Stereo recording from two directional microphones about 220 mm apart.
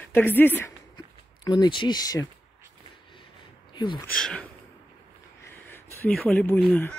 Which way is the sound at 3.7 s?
20° left (ahead or behind).